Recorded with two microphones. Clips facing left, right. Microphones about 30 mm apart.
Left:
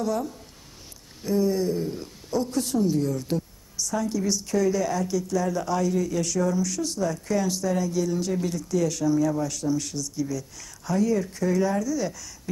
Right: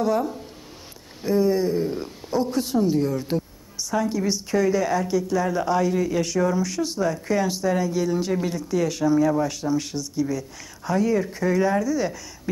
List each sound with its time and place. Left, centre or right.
0.0 s a woman's voice: right